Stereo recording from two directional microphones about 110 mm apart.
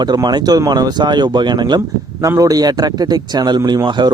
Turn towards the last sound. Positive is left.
turn(degrees=-40)  # may be behind; listen again after turning